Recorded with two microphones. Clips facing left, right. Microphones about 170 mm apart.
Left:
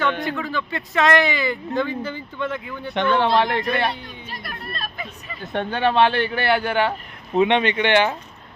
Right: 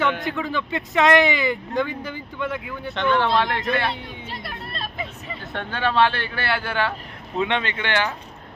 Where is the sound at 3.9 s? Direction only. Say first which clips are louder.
Right 2 dB; 20° right (ahead or behind).